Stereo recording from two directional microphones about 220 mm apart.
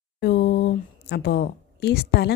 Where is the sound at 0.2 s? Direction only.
50° left (ahead or behind).